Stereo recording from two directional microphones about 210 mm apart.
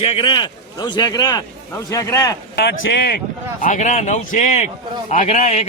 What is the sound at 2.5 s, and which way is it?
Speech, 55° left (ahead or behind).